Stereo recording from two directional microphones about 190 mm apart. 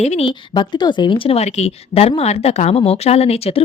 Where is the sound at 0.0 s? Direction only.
35° left (ahead or behind).